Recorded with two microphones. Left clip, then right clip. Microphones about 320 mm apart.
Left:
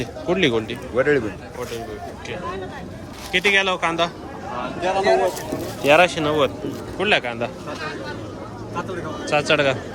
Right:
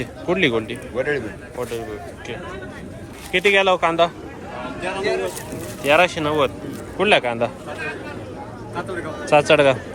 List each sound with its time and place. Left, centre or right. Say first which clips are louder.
0.0 s speech: even; centre
3.3 s speech: right 2 dB; centre
4.8 s speech: left 5 dB; left
5.8 s speech: left 1 dB; centre
9.3 s speech: right 4 dB; centre